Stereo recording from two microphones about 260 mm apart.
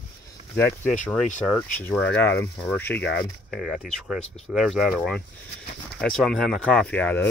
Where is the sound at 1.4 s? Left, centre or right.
Centre.